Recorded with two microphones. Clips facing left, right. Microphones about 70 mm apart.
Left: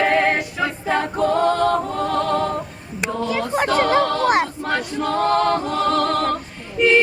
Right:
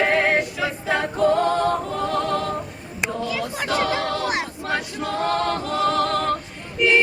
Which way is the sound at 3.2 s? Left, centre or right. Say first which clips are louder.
Left 5 dB; left.